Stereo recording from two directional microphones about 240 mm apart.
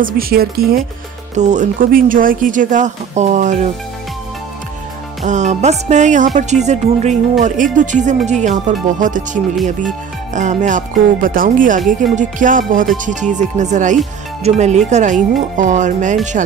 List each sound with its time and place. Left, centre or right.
0.0 s speech: right
5.2 s music: right
10.3 s speech: right